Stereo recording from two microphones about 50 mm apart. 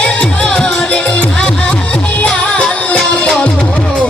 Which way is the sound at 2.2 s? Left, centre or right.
Left.